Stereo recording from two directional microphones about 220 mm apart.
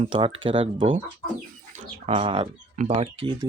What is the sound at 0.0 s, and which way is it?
Speech, 25° right (ahead or behind).